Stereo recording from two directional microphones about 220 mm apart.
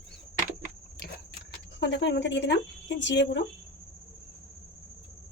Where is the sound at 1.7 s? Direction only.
55° left (ahead or behind).